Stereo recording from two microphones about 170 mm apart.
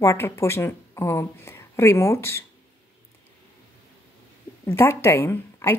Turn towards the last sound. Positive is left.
turn(degrees=15)  # may be behind; listen again after turning